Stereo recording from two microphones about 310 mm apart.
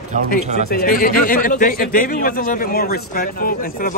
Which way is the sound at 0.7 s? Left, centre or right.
Left.